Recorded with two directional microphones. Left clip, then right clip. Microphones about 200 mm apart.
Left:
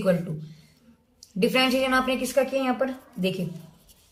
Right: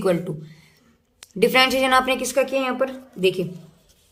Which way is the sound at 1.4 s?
50° right (ahead or behind).